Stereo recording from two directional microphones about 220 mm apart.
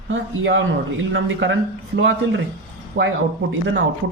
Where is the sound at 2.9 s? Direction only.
55° right (ahead or behind).